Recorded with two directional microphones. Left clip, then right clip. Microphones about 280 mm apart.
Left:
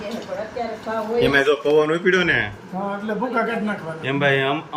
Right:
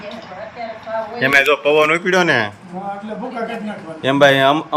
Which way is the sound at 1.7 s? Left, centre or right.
Right.